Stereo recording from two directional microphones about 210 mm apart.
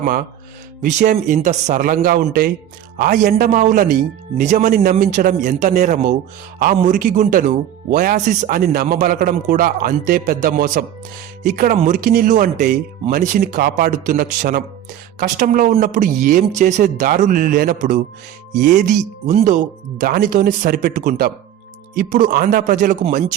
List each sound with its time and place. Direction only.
0.0 s speech: 40° right (ahead or behind)